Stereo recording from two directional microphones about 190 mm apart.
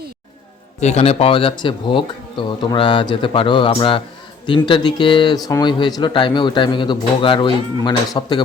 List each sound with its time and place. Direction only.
0.8 s speech: 35° left (ahead or behind)